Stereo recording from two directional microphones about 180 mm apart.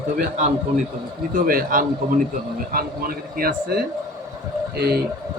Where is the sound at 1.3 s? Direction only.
50° right (ahead or behind).